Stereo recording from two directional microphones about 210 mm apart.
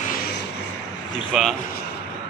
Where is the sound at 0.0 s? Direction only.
45° left (ahead or behind).